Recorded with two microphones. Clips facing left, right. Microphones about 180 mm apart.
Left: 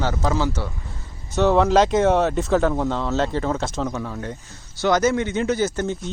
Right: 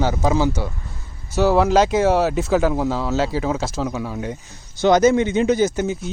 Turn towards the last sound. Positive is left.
turn(degrees=-15)  # may be behind; listen again after turning